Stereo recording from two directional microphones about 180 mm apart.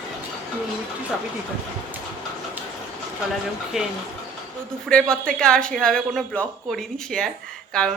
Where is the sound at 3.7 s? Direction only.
5° right (ahead or behind).